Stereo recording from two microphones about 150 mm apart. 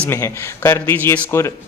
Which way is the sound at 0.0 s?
15° left (ahead or behind).